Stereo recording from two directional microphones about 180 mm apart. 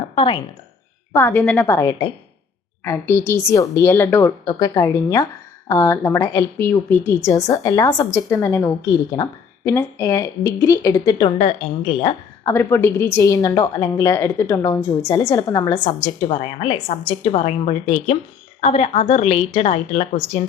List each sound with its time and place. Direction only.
0.2 s a woman's voice: 25° left (ahead or behind)
1.1 s a woman's voice: 10° left (ahead or behind); by 12.5 s 30° left (ahead or behind)
12.5 s a woman's voice: 15° left (ahead or behind); by 20.4 s 35° left (ahead or behind)